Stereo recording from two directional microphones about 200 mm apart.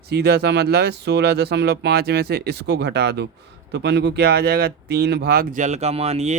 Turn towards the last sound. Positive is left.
turn(degrees=-30)  # may be behind; listen again after turning